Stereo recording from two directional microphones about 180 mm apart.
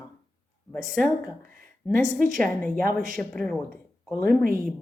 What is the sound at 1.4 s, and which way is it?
Speech, 50° right (ahead or behind).